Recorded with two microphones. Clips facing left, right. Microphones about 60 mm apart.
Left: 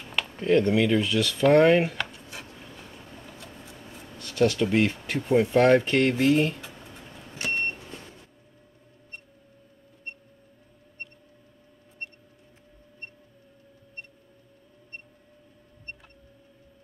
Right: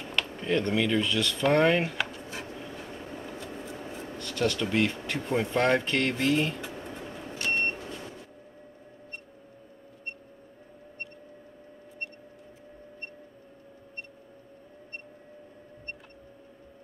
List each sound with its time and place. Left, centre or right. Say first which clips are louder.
0.1 s speech: left 6 dB; centre
4.3 s speech: left 5 dB; centre
6.9 s vehicle: right 6 dB; right